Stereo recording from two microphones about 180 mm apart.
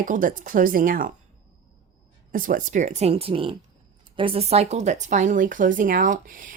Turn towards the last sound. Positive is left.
turn(degrees=-50)  # may be behind; listen again after turning